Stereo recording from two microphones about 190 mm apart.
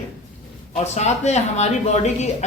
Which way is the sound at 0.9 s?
35° left (ahead or behind).